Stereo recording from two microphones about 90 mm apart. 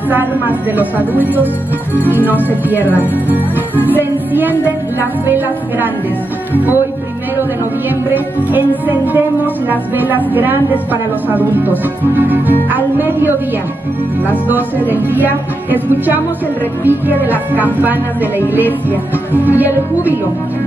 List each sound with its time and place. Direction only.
0.1 s music: 20° right (ahead or behind)
8.1 s music: 20° right (ahead or behind)